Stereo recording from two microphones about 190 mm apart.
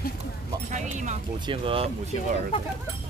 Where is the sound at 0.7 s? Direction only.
40° right (ahead or behind).